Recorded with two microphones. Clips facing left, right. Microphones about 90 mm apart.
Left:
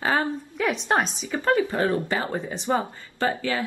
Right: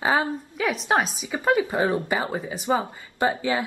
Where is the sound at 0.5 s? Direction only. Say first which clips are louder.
Even; centre (ahead or behind).